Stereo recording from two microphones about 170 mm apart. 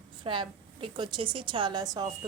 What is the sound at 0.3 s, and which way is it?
A woman's voice, 30° right (ahead or behind).